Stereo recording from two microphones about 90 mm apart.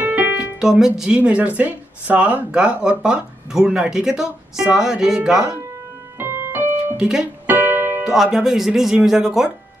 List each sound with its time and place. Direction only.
0.0 s piano: 20° right (ahead or behind)
0.6 s speech: 5° right (ahead or behind)
6.1 s music: 25° right (ahead or behind)
7.0 s speech: 5° right (ahead or behind)
7.4 s music: 20° right (ahead or behind)
8.0 s speech: 5° right (ahead or behind)